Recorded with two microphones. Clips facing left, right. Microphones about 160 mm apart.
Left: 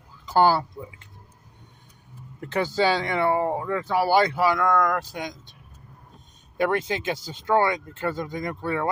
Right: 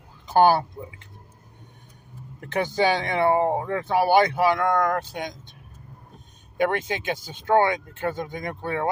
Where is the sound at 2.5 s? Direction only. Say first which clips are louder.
Even; 20° right (ahead or behind).